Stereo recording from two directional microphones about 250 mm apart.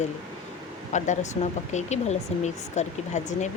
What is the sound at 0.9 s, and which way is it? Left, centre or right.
Speech, left.